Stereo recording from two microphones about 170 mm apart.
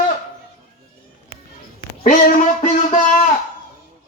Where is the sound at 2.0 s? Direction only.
45° left (ahead or behind).